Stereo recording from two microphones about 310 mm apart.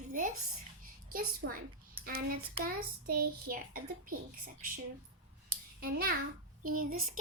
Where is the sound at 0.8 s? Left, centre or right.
Right.